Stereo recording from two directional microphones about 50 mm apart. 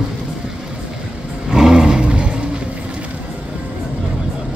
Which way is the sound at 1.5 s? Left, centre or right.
Centre.